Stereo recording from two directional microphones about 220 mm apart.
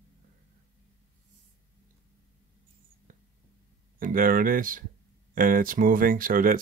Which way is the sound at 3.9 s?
40° right (ahead or behind).